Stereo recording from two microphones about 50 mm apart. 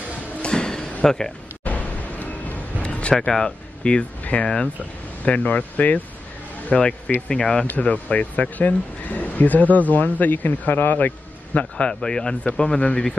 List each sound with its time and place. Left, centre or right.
0.4 s a sound: centre
1.0 s speech: centre
1.6 s music: left
3.2 s speech: centre
4.2 s a sound: left
5.2 s speech: left
6.7 s speech: centre
7.7 s speech: left
11.7 s speech: centre